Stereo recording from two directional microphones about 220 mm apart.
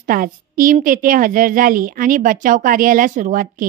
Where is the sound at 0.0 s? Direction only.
40° right (ahead or behind).